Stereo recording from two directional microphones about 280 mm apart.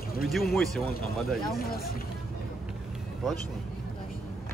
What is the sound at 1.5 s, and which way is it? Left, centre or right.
Speech, left.